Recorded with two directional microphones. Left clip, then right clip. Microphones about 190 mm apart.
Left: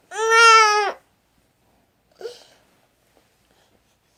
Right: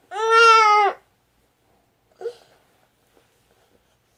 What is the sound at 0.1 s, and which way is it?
Baby cry, 30° left (ahead or behind).